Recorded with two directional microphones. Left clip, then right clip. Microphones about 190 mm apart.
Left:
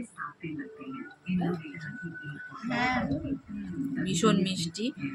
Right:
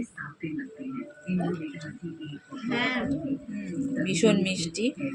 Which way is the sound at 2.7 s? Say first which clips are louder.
Right 1 dB; 45° left (ahead or behind).